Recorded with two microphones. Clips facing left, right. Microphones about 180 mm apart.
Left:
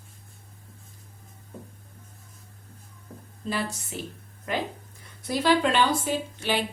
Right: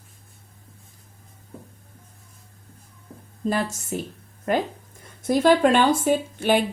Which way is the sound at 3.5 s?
45° right (ahead or behind).